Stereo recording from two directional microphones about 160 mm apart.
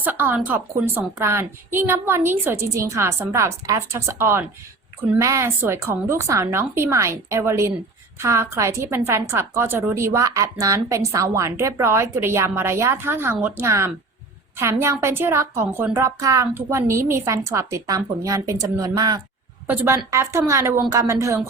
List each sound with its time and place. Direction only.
0.0 s a woman's voice: 10° right (ahead or behind)